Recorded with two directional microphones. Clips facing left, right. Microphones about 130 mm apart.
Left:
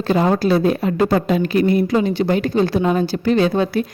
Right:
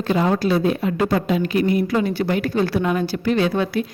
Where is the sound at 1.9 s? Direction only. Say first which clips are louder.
Left 3 dB; 20° left (ahead or behind).